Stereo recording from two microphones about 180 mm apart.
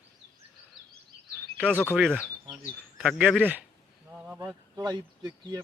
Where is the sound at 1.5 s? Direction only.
10° left (ahead or behind).